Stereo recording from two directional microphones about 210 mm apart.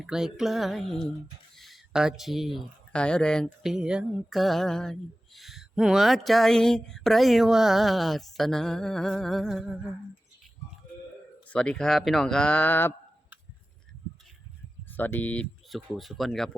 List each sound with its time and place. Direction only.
0.0 s speech: centre (ahead or behind)
11.4 s speech: 5° left (ahead or behind)
14.9 s speech: 10° left (ahead or behind)